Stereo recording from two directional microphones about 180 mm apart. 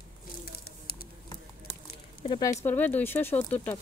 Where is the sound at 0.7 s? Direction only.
55° left (ahead or behind).